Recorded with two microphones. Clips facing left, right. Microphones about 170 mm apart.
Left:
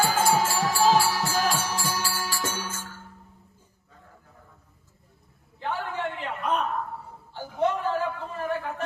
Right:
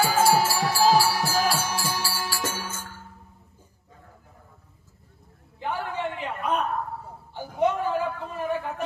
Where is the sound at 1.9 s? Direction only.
15° right (ahead or behind).